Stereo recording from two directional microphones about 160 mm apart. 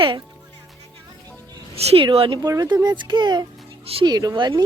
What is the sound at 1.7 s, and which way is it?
Speech, 35° right (ahead or behind).